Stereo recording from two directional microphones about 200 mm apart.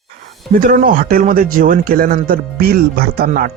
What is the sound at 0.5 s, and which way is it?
A man's voice, 45° right (ahead or behind).